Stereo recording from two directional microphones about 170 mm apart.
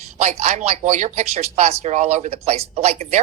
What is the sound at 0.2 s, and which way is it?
Speech, 40° right (ahead or behind).